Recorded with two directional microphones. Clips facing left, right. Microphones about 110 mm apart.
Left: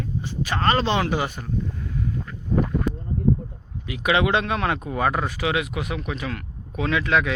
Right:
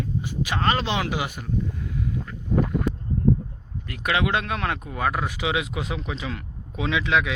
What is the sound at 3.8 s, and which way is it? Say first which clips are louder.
Speech: left 3 dB; 5° left (ahead or behind).